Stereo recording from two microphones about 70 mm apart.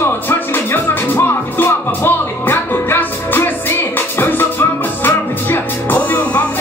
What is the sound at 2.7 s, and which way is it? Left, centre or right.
Music, left.